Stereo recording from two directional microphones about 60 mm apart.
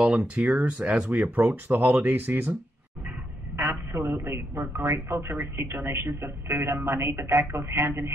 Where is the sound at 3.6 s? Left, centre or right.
Right.